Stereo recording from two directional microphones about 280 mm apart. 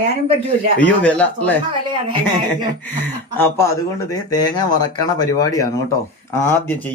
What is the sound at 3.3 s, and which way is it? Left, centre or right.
Speech, centre.